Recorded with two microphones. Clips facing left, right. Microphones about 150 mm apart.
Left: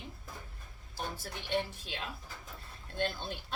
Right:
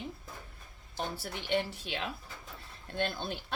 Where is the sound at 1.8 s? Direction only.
80° right.